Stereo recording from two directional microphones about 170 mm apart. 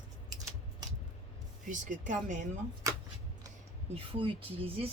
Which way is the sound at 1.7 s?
45° right (ahead or behind).